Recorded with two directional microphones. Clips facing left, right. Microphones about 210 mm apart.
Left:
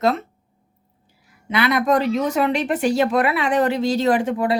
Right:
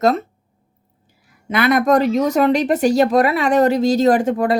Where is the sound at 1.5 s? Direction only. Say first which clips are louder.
Right 4 dB; 45° right (ahead or behind).